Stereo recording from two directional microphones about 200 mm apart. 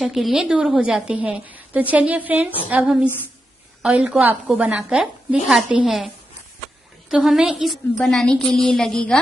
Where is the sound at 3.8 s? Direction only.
5° right (ahead or behind).